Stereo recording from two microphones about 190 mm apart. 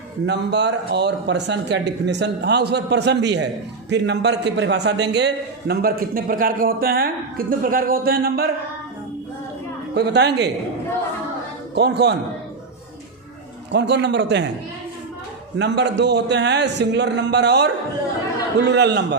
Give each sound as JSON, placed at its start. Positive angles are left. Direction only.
{"t": 0.3, "sound": "speech", "side_deg": -65}
{"t": 9.9, "sound": "speech", "side_deg": -60}
{"t": 11.7, "sound": "speech", "side_deg": -60}
{"t": 13.7, "sound": "a man's voice", "side_deg": -65}
{"t": 15.5, "sound": "speech", "side_deg": -65}
{"t": 18.7, "sound": "speech", "side_deg": -65}